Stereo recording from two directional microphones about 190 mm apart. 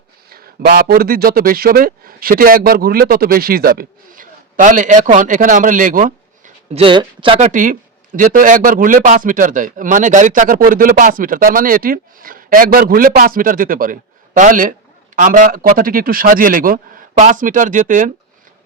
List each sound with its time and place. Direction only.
0.3 s a man's voice: 50° right (ahead or behind)
6.7 s speech: 25° right (ahead or behind)
7.3 s a man's voice: 40° right (ahead or behind)